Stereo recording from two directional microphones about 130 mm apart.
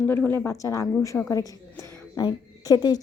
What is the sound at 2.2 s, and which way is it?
Speech, 30° left (ahead or behind).